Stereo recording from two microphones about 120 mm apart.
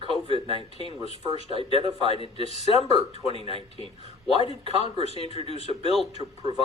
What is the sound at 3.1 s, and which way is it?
Speech, 50° right (ahead or behind).